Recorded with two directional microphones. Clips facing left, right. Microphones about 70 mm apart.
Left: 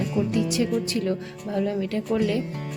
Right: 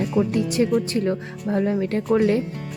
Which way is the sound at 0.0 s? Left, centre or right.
Right.